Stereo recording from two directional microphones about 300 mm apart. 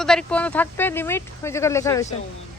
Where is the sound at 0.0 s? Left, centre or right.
Centre.